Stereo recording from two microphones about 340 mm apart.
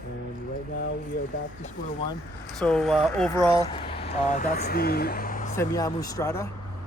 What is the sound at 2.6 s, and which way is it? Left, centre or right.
Speech, centre.